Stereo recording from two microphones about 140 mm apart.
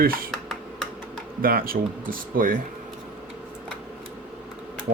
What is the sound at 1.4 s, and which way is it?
Speech, 90° right.